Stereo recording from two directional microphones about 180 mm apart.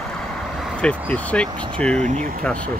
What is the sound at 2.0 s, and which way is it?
Speech, 40° right (ahead or behind).